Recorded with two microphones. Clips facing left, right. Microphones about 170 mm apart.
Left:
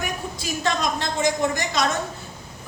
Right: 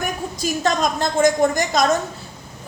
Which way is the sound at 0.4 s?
45° right (ahead or behind).